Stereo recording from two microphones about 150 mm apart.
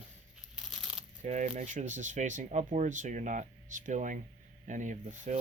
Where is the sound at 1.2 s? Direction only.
50° right (ahead or behind).